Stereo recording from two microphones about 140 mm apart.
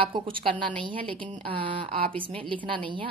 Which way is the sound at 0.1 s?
35° right (ahead or behind).